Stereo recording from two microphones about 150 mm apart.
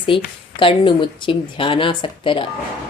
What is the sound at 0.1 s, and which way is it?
Speech, 35° left (ahead or behind).